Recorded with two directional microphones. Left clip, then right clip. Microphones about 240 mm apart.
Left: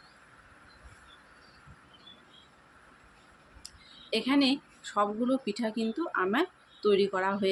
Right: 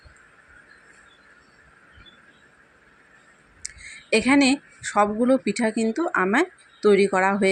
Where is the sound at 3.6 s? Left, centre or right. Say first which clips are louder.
Right 11 dB; right.